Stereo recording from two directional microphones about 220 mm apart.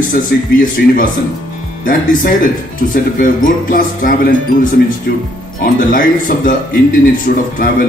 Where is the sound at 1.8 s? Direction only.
40° left (ahead or behind).